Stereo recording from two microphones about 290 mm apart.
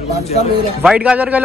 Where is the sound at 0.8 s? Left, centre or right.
Centre.